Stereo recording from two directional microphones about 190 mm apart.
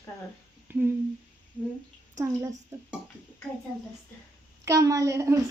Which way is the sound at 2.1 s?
15° right (ahead or behind).